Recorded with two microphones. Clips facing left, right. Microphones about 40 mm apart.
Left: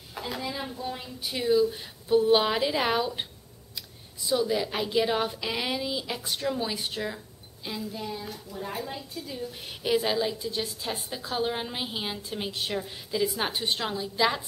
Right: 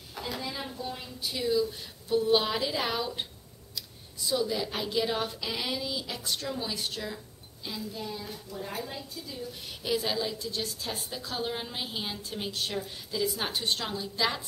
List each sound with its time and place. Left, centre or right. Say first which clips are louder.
0.1 s a woman's voice: left 2 dB; centre
1.3 s a woman's voice: left 5 dB; left
4.3 s a woman's voice: left 3 dB; centre
9.2 s a woman's voice: left 3 dB; left